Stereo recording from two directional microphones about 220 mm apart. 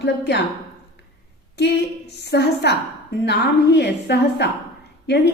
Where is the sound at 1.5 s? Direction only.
50° left (ahead or behind).